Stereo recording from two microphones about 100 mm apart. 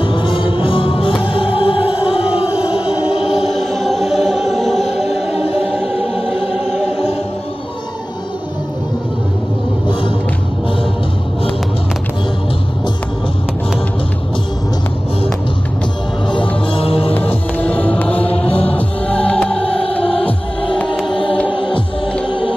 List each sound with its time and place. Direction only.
0.0 s music: 55° left (ahead or behind)
2.4 s music: 10° right (ahead or behind)
5.7 s choir: 5° right (ahead or behind)
16.3 s music: 60° left (ahead or behind)
17.6 s music: 15° left (ahead or behind)
19.6 s music: 70° left (ahead or behind)
21.1 s choir: 60° left (ahead or behind)